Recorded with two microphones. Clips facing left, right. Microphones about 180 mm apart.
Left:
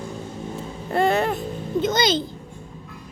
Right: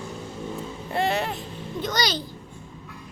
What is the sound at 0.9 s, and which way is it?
Speech, 50° left (ahead or behind).